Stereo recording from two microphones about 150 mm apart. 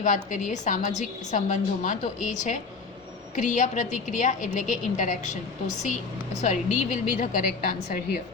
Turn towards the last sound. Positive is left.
turn(degrees=65)  # may be behind; listen again after turning